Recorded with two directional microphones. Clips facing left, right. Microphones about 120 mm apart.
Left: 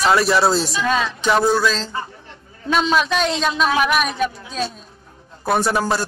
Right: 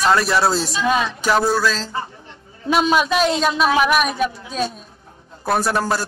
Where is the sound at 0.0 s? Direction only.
Centre (ahead or behind).